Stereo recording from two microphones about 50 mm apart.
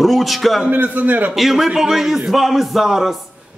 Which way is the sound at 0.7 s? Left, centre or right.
Right.